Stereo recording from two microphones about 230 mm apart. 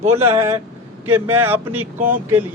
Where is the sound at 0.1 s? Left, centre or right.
Centre.